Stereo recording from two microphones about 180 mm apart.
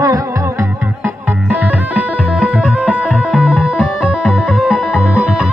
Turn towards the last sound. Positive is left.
turn(degrees=-5)  # may be behind; listen again after turning